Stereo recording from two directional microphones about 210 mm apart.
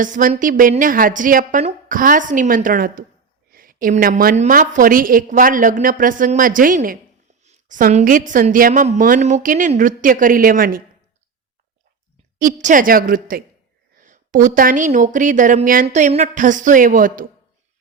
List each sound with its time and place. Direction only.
0.0 s a woman's voice: 40° right (ahead or behind)
12.4 s a woman's voice: 40° right (ahead or behind)